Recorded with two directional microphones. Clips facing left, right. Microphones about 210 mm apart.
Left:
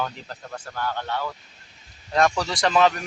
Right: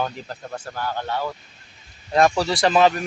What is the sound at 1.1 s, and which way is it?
Speech, 30° right (ahead or behind).